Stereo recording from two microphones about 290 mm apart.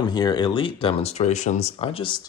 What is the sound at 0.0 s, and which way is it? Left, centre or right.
Speech, centre.